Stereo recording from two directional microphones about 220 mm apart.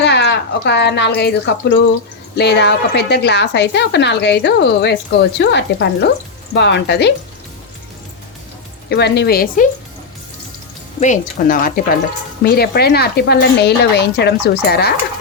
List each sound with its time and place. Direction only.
0.0 s a woman's voice: 50° left (ahead or behind)
8.9 s a woman's voice: 50° left (ahead or behind)
11.0 s a woman's voice: 35° left (ahead or behind)